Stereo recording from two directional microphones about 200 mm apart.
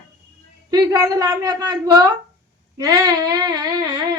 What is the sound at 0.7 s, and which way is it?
A woman's voice, 20° right (ahead or behind).